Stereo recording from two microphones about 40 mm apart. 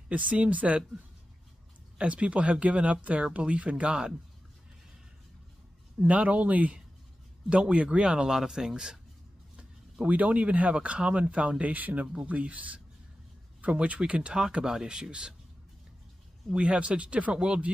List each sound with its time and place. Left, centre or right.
0.1 s speech: right
2.0 s speech: right
6.0 s speech: right; by 9.0 s centre
10.0 s speech: right
11.7 s speech: right
14.4 s speech: centre
16.5 s speech: right